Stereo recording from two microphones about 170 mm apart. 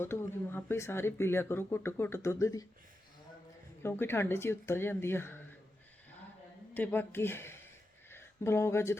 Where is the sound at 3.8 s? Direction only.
15° left (ahead or behind).